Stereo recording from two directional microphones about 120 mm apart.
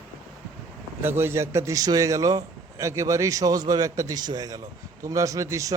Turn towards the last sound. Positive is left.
turn(degrees=-25)  # may be behind; listen again after turning